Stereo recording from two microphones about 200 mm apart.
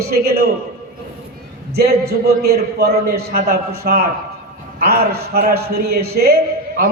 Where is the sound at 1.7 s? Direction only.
50° right (ahead or behind).